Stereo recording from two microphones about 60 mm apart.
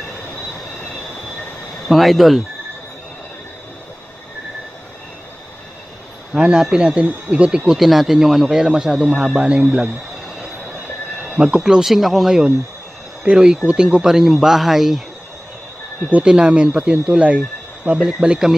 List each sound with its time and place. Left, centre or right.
1.9 s speech: centre
6.3 s speech: centre
7.8 s speech: centre
10.2 s a sound: centre
11.2 s speech: centre
16.1 s speech: centre